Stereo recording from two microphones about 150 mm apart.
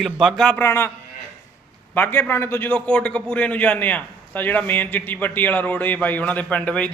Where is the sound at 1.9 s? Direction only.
15° left (ahead or behind).